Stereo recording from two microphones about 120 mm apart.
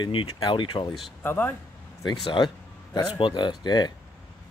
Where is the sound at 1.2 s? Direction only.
15° left (ahead or behind).